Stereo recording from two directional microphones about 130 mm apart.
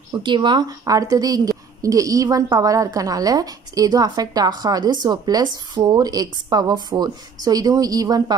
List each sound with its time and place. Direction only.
0.1 s a woman's voice: 35° right (ahead or behind)